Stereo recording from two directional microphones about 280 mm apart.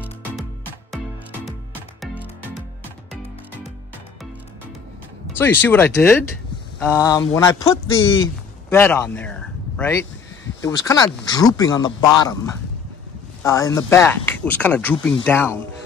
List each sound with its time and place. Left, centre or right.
0.0 s music: centre
5.4 s speech: centre
7.8 s speech: left
8.6 s speech: centre
13.4 s speech: centre